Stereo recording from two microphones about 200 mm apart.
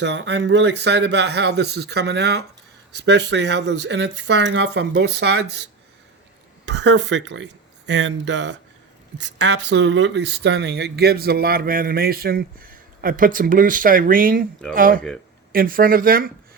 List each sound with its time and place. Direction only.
0.0 s speech: 60° right (ahead or behind)
6.7 s speech: 60° right (ahead or behind)